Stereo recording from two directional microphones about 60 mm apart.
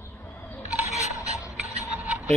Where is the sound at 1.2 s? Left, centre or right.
Left.